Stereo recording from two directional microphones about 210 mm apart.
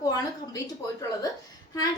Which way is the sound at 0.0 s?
20° left (ahead or behind).